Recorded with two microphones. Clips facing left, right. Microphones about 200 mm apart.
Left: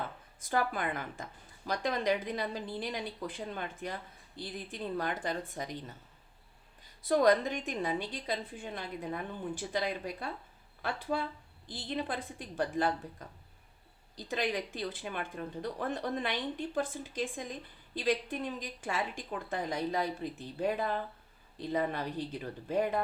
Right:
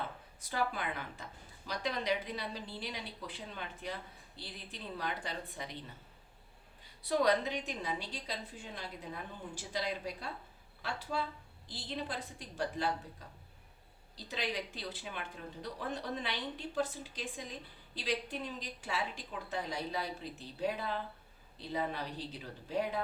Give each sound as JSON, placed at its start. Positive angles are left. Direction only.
{"t": 0.4, "sound": "a woman's voice", "side_deg": 50}
{"t": 7.1, "sound": "a woman's voice", "side_deg": 50}
{"t": 14.3, "sound": "a woman's voice", "side_deg": 50}